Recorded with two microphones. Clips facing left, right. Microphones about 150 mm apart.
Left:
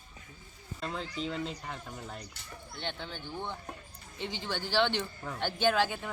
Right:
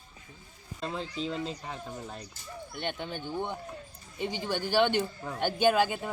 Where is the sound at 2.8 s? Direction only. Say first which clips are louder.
Right 4 dB; 15° right (ahead or behind).